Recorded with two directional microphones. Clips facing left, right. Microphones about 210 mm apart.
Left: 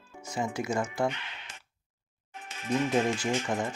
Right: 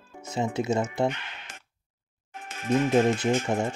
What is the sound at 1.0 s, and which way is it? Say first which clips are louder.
Music: right 3 dB; 45° right (ahead or behind).